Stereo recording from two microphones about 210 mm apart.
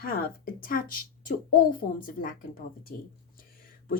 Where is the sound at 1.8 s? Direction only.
40° left (ahead or behind).